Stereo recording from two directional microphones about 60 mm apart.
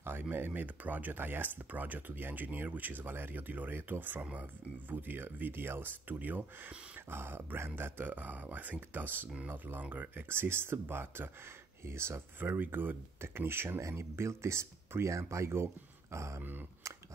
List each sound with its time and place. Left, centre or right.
0.0 s speech: right
7.1 s speech: right
12.4 s speech: right
16.8 s a sound: right